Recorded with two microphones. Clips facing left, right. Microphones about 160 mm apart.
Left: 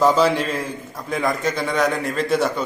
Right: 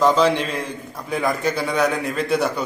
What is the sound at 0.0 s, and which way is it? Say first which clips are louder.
A man's voice: even; 5° left (ahead or behind).